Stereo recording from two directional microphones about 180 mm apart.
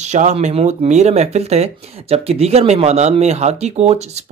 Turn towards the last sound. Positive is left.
turn(degrees=-35)  # may be behind; listen again after turning